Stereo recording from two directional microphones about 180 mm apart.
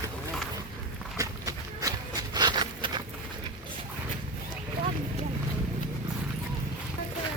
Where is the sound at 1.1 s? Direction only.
20° right (ahead or behind).